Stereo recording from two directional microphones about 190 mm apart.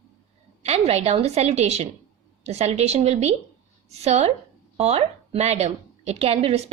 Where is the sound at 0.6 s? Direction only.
35° right (ahead or behind).